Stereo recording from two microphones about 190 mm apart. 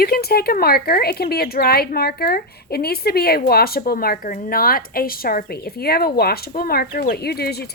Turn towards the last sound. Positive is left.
turn(degrees=55)  # may be behind; listen again after turning